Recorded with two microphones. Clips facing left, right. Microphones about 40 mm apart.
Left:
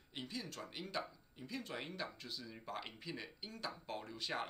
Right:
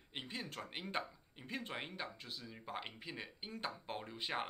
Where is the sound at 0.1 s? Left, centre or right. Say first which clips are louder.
Right 1 dB; right.